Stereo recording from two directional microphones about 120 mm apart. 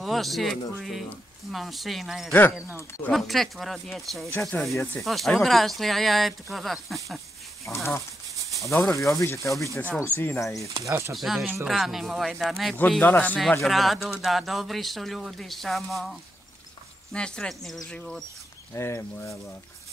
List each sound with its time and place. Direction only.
0.0 s speech: centre (ahead or behind)
4.3 s speech: 20° left (ahead or behind)
4.6 s speech: centre (ahead or behind)
7.6 s speech: 25° left (ahead or behind)
10.7 s speech: 25° right (ahead or behind)
11.1 s speech: centre (ahead or behind)
13.0 s speech: 15° left (ahead or behind)
13.4 s speech: centre (ahead or behind)
18.8 s speech: 20° left (ahead or behind)